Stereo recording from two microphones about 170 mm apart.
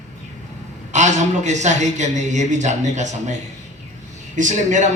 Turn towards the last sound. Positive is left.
turn(degrees=-45)  # may be behind; listen again after turning